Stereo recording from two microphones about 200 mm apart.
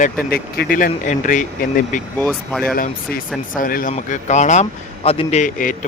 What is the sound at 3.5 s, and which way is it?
Speech, 45° left (ahead or behind).